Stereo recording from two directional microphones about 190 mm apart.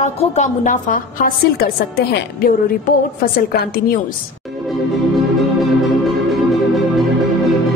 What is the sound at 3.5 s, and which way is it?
Speech, 55° left (ahead or behind).